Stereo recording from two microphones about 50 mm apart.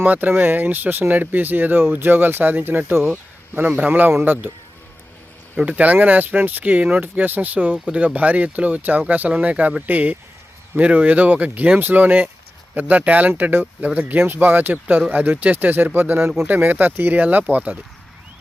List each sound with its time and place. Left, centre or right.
0.0 s speech: right
5.5 s speech: right
16.5 s speech: right
17.2 s speech: right